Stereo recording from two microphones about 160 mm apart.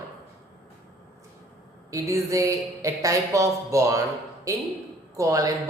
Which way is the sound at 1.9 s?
20° right (ahead or behind).